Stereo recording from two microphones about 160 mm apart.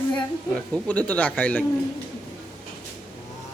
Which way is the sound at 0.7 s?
5° left (ahead or behind).